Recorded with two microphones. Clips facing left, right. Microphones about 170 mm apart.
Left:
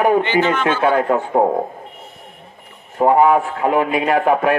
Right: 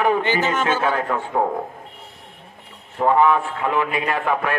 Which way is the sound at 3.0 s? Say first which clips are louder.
Left 4 dB; 30° left (ahead or behind).